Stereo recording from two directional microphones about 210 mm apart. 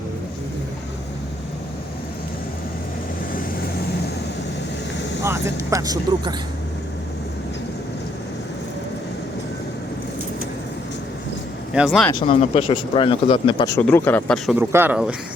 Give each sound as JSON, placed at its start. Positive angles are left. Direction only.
{"t": 5.2, "sound": "speech", "side_deg": -15}
{"t": 11.7, "sound": "speech", "side_deg": -5}
{"t": 12.1, "sound": "speech", "side_deg": 25}
{"t": 13.7, "sound": "speech", "side_deg": 10}
{"t": 14.5, "sound": "speech", "side_deg": -10}